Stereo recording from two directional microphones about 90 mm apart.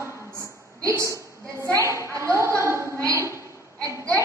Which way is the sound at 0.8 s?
35° right (ahead or behind).